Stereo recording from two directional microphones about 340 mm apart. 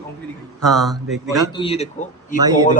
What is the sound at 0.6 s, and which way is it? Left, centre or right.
Speech, centre.